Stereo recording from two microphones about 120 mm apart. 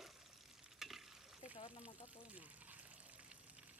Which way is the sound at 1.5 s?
45° left (ahead or behind).